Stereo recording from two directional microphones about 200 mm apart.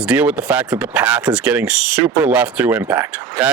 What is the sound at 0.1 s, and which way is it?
Speech, 5° right (ahead or behind).